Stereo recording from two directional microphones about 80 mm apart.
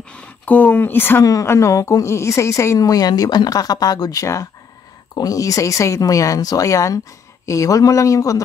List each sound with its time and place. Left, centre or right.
0.5 s speech: left
1.2 s a woman's voice: left